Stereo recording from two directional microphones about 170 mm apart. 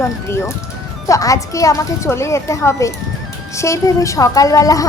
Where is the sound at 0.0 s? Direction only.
15° left (ahead or behind).